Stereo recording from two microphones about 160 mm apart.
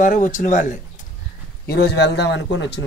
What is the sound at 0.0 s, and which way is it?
Speech, 55° left (ahead or behind).